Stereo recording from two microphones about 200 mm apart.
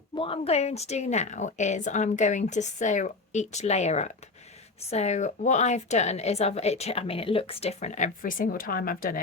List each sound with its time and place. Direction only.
0.2 s a woman's voice: 30° left (ahead or behind); by 9.2 s 45° left (ahead or behind)